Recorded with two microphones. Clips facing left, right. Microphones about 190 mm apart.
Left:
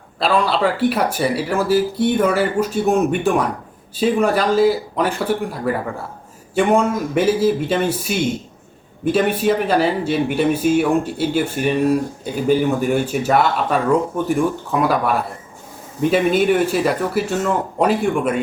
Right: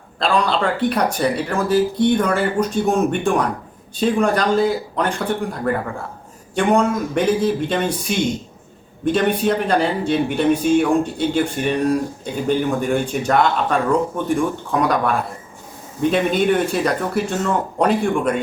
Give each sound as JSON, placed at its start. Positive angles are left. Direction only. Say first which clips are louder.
{"t": 0.2, "sound": "speech", "louder": "left 1 dB", "side_deg": 5}